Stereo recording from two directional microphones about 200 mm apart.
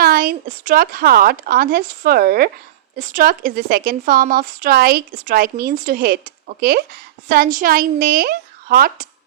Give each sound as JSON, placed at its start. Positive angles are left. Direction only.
{"t": 0.0, "sound": "speech", "side_deg": -50}